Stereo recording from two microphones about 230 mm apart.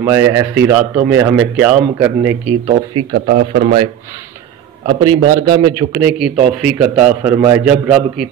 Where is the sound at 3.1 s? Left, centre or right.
Right.